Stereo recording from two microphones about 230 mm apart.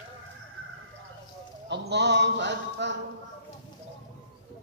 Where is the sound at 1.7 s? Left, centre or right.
Right.